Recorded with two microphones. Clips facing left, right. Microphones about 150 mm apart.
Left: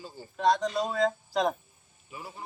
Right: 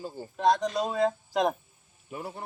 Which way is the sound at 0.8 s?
15° right (ahead or behind).